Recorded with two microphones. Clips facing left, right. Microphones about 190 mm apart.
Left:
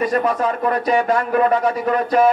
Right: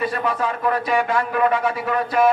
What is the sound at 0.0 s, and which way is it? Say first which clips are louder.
A man's voice: left 4 dB; 40° left (ahead or behind).